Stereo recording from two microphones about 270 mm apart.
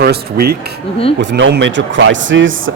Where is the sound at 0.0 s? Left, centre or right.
Right.